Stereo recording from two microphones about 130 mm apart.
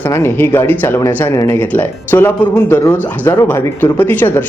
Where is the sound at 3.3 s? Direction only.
25° left (ahead or behind).